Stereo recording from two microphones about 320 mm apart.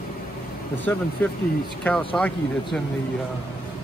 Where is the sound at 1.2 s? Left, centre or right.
Centre.